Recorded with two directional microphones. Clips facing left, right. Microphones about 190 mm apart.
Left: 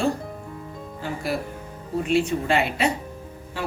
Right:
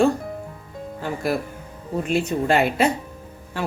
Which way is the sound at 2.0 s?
45° right (ahead or behind).